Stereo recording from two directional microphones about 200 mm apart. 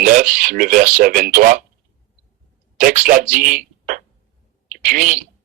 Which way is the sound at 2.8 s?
40° right (ahead or behind).